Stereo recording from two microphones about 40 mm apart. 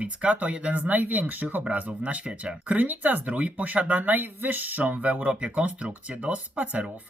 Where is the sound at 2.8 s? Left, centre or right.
Right.